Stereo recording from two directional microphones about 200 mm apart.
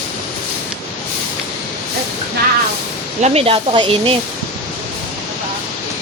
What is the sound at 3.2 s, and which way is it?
Speech, 30° right (ahead or behind).